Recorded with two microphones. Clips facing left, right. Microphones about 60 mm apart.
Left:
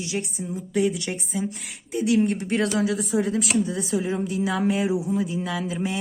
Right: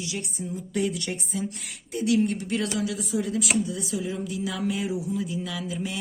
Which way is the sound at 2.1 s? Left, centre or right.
Left.